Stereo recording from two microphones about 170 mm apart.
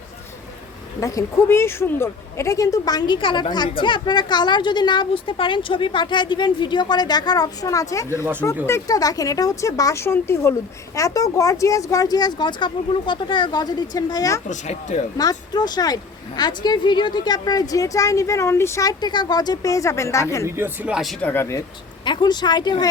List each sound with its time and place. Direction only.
0.9 s speech: 20° left (ahead or behind)
14.5 s speech: 45° left (ahead or behind)
15.2 s speech: 25° left (ahead or behind)
20.6 s speech: 10° right (ahead or behind)
21.2 s speech: 15° left (ahead or behind)
22.0 s speech: 25° left (ahead or behind)